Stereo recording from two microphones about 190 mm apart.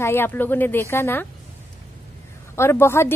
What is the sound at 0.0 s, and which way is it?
A woman's voice, 10° left (ahead or behind).